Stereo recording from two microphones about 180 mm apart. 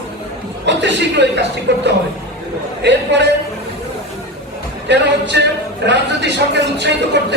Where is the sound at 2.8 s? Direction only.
75° right (ahead or behind).